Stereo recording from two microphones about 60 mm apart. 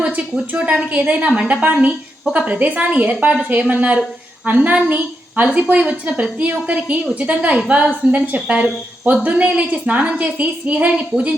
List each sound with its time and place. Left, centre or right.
0.5 s a woman's voice: centre
8.5 s a woman's voice: centre